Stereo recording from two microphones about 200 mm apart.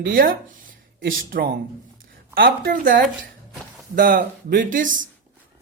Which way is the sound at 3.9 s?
45° right (ahead or behind).